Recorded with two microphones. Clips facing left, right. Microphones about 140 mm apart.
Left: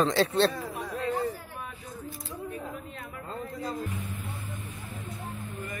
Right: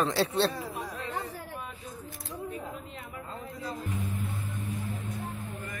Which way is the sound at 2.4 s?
20° right (ahead or behind).